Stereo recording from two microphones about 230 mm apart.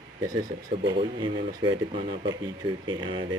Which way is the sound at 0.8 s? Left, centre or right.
Right.